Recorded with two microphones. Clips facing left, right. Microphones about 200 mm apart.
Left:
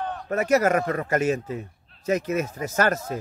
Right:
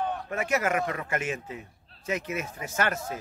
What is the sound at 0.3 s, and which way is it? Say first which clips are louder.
A man's voice: left 9 dB; 40° left (ahead or behind).